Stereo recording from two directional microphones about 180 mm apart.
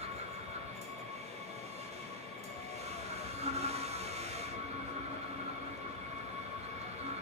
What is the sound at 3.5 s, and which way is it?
Train, 35° right (ahead or behind).